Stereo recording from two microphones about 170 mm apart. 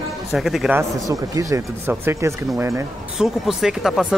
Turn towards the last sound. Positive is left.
turn(degrees=0)  # may be behind; listen again after turning